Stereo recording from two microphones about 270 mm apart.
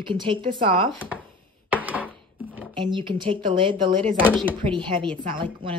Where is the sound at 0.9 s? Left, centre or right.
Centre.